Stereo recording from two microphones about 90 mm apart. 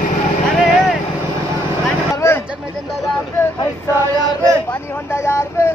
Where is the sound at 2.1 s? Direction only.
30° left (ahead or behind).